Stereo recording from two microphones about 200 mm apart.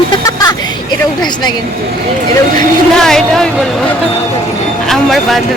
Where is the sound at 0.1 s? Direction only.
20° left (ahead or behind).